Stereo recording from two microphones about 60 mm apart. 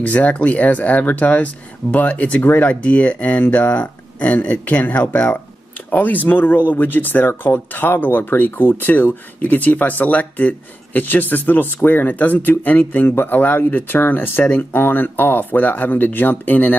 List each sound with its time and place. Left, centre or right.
0.0 s speech: left